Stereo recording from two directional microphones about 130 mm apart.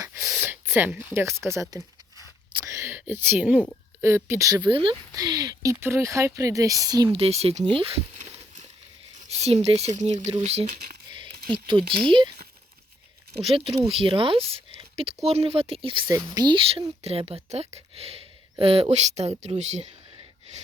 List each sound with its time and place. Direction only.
0.0 s a sound: 20° right (ahead or behind)
0.3 s speech: 10° right (ahead or behind)
2.6 s a sound: 20° right (ahead or behind)
4.0 s speech: 20° right (ahead or behind); by 4.9 s 40° right (ahead or behind)
5.1 s speech: 30° right (ahead or behind)
7.1 s speech: 50° right (ahead or behind)
8.2 s a sound: 65° right (ahead or behind)
9.1 s speech: 55° right (ahead or behind)
11.1 s speech: 40° right (ahead or behind)
13.5 s speech: 45° right (ahead or behind)